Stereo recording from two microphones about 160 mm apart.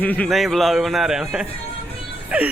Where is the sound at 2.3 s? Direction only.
10° right (ahead or behind).